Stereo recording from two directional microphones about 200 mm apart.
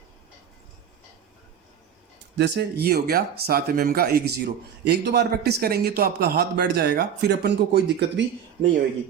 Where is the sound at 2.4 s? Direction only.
55° right (ahead or behind).